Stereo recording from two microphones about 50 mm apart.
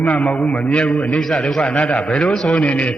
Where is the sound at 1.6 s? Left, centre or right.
Centre.